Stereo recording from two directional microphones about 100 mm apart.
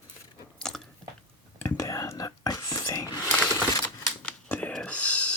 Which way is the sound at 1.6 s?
30° left (ahead or behind).